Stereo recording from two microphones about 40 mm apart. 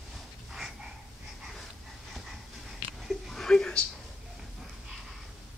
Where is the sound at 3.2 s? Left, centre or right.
Centre.